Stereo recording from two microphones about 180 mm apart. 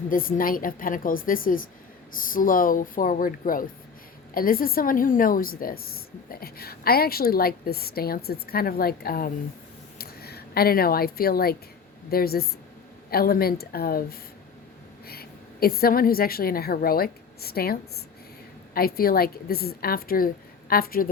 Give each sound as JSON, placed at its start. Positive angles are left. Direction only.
{"t": 0.1, "sound": "a woman's voice", "side_deg": 50}